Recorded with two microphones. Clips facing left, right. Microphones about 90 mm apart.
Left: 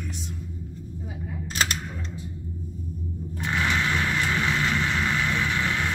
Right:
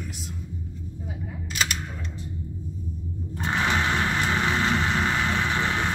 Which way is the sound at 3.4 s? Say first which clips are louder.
Right 1 dB; 30° right (ahead or behind).